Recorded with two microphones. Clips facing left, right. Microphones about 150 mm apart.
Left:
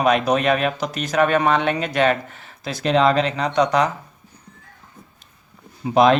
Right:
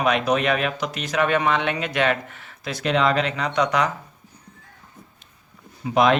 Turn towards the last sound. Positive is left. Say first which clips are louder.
# left 3 dB
turn(degrees=35)  # may be behind; listen again after turning